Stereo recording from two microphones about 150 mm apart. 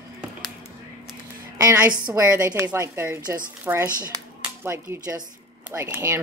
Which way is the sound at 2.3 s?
15° right (ahead or behind).